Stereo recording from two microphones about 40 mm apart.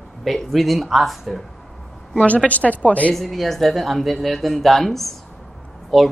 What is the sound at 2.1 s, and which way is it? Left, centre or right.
A woman's voice, left.